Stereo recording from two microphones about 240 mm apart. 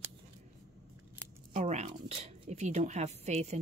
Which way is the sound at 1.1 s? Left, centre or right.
Right.